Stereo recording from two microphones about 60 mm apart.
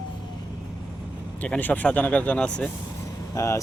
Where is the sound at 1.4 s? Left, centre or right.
Left.